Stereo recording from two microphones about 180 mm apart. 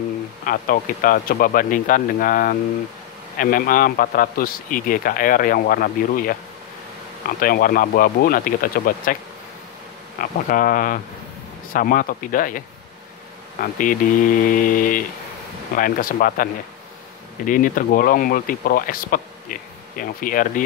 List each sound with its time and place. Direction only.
0.5 s speech: 50° left (ahead or behind)
10.2 s speech: 50° left (ahead or behind)
17.5 s speech: 50° left (ahead or behind)